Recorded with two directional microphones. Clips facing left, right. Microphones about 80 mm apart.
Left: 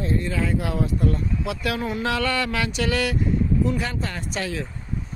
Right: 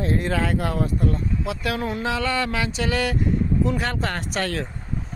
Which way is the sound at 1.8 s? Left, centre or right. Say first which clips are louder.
Even; right.